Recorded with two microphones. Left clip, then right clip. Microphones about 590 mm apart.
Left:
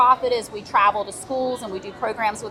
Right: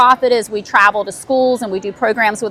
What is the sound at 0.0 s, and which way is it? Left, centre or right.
A woman's voice, right.